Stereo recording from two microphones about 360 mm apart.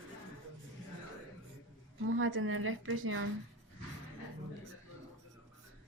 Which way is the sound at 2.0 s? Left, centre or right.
Right.